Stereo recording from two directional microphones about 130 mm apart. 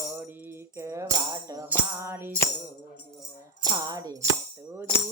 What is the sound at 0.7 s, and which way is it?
Music, 20° right (ahead or behind).